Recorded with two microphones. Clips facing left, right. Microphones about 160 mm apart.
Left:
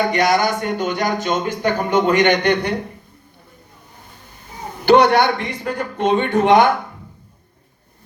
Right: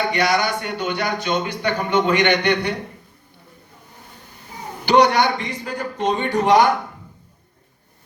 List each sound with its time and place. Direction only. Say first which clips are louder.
0.1 s speech: left 3 dB; 45° left (ahead or behind)
4.9 s a man's voice: left 3 dB; 55° left (ahead or behind)